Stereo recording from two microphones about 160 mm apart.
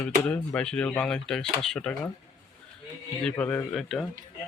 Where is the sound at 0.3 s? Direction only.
5° left (ahead or behind).